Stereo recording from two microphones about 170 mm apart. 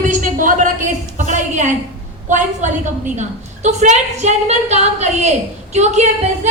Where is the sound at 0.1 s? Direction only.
50° right (ahead or behind).